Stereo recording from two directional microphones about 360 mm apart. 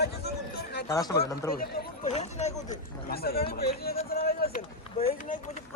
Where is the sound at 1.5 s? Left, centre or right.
Left.